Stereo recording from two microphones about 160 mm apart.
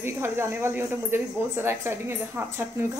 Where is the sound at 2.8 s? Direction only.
20° right (ahead or behind).